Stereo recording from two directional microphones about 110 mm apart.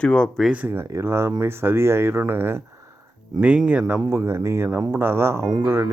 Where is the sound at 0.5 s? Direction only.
15° right (ahead or behind).